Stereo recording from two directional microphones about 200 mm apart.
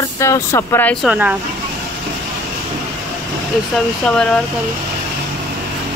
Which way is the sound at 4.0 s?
5° left (ahead or behind).